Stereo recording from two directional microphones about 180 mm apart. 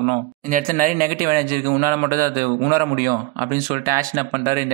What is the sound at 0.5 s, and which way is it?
Speech, 50° right (ahead or behind).